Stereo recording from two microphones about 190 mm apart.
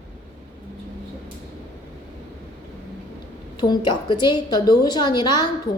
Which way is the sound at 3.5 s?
25° left (ahead or behind).